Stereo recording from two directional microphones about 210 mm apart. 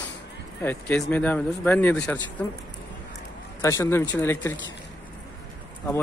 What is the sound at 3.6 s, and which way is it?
Speech, 15° left (ahead or behind).